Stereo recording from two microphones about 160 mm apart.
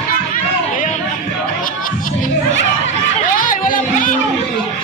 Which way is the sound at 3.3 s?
55° left (ahead or behind).